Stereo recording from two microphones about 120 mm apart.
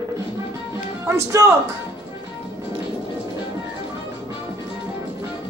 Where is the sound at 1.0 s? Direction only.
25° right (ahead or behind).